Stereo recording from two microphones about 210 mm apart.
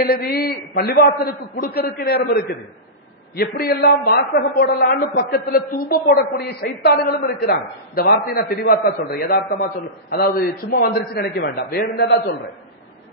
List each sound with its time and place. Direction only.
0.1 s a man's voice: 45° left (ahead or behind)